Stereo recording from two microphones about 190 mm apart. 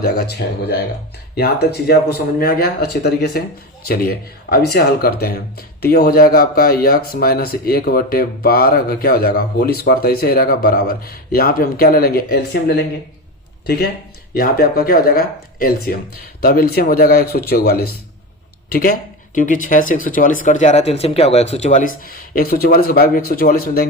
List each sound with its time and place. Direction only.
0.0 s speech: 55° left (ahead or behind)